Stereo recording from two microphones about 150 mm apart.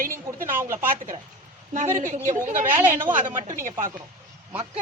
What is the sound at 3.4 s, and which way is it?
Speech, 60° right (ahead or behind).